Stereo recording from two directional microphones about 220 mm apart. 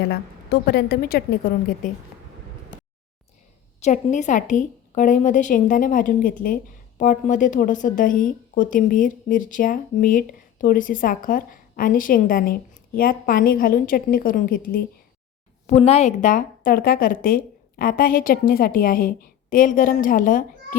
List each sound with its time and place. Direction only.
0.0 s a woman's voice: 45° left (ahead or behind)
3.8 s a woman's voice: 35° left (ahead or behind)
15.6 s a woman's voice: 30° left (ahead or behind)